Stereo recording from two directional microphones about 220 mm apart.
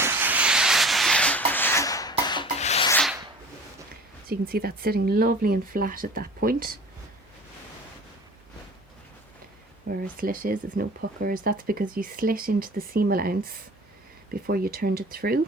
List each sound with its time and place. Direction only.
0.0 s rub: 10° right (ahead or behind); by 2.8 s 30° left (ahead or behind)
2.9 s rub: centre (ahead or behind)
4.3 s speech: 45° right (ahead or behind)
9.8 s speech: 40° right (ahead or behind)